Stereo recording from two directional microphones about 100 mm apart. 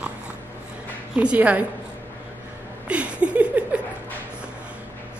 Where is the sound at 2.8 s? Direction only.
10° right (ahead or behind).